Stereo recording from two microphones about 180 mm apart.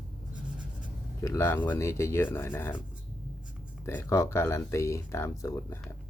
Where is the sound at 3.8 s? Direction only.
15° left (ahead or behind).